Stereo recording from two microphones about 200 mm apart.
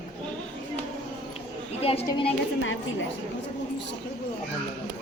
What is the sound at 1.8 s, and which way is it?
Speech, 30° left (ahead or behind).